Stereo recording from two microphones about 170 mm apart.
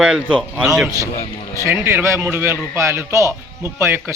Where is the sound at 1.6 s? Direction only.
15° right (ahead or behind).